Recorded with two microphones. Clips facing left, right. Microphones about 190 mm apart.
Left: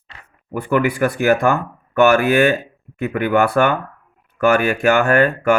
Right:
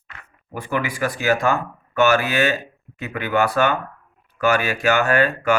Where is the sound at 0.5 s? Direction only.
60° left (ahead or behind).